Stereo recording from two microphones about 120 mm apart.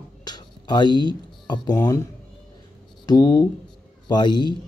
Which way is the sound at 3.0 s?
30° left (ahead or behind).